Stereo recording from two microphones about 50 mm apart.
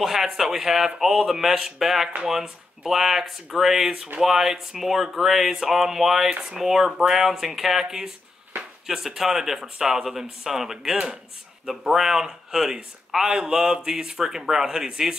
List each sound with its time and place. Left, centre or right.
0.0 s speech: centre